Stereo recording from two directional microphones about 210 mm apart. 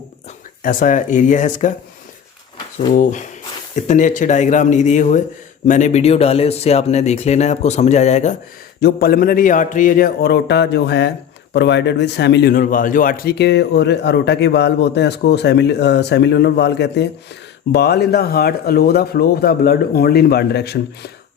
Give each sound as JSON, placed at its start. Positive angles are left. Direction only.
{"t": 0.6, "sound": "speech", "side_deg": 40}
{"t": 3.0, "sound": "speech", "side_deg": 35}
{"t": 8.8, "sound": "a man's voice", "side_deg": 45}